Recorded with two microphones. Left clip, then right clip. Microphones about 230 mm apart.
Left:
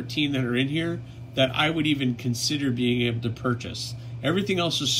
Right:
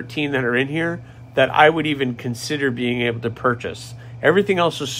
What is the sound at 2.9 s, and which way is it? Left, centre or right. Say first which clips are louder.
Speech: right 5 dB; right.